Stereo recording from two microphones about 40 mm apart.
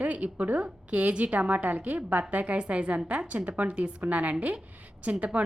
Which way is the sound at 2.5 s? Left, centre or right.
Right.